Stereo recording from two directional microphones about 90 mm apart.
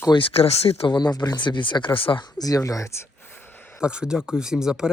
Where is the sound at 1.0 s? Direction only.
50° left (ahead or behind); by 2.2 s 75° left (ahead or behind).